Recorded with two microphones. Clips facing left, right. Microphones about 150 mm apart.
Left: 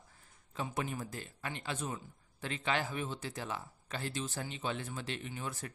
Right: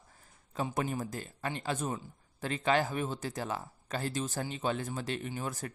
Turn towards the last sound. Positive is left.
turn(degrees=-40)  # may be behind; listen again after turning